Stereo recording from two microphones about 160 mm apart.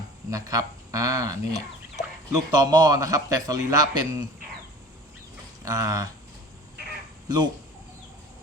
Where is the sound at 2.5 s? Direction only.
25° right (ahead or behind).